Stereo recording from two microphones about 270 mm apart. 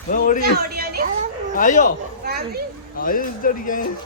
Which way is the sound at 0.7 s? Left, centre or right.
Right.